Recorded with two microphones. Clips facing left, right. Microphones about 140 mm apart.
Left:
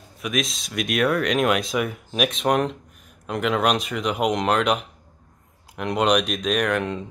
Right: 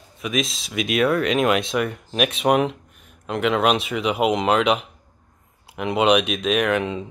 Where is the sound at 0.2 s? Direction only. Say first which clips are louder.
Right 1 dB; centre (ahead or behind).